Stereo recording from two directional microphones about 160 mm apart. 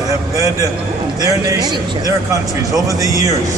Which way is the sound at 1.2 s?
25° right (ahead or behind).